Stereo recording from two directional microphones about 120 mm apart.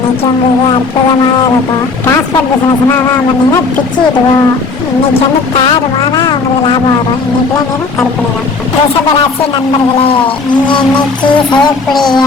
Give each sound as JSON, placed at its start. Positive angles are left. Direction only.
{"t": 5.5, "sound": "speech", "side_deg": 45}
{"t": 11.5, "sound": "child singing", "side_deg": 5}